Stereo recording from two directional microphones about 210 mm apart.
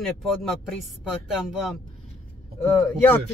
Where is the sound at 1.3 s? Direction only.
Centre (ahead or behind).